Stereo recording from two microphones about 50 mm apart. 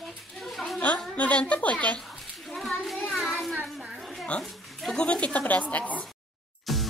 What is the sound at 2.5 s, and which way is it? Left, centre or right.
Child singing, centre.